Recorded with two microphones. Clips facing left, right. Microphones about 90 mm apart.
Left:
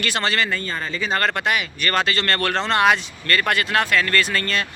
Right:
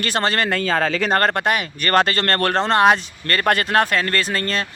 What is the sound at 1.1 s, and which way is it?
Speech, 45° right (ahead or behind).